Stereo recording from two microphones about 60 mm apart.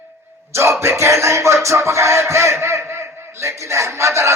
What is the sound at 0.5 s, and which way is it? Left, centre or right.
Music, right.